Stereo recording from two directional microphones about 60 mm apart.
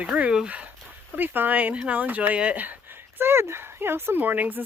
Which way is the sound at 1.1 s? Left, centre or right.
Right.